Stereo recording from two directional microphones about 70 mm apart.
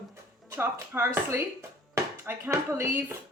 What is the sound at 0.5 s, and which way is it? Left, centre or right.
Speech, right.